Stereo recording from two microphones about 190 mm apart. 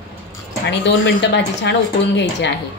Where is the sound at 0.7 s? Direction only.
65° left (ahead or behind).